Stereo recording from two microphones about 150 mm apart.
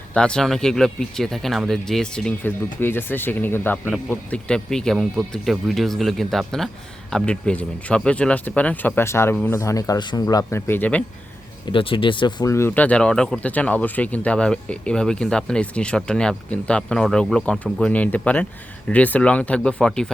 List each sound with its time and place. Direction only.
0.1 s speech: 5° left (ahead or behind)
11.6 s speech: 35° left (ahead or behind)
12.5 s speech: 15° left (ahead or behind)